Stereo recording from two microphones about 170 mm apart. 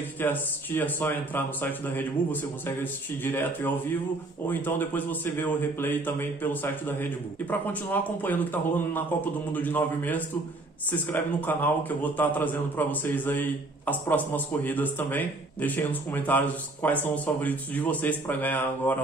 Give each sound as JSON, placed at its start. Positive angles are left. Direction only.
{"t": 0.2, "sound": "a man's voice", "side_deg": 10}